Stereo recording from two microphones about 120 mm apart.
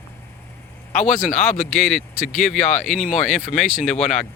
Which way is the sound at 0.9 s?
80° left.